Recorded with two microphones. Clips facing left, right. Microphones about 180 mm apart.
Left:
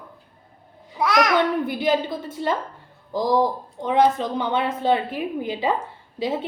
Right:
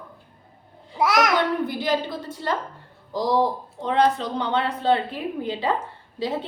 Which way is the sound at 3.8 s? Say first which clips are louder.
Left 2 dB; 15° left (ahead or behind).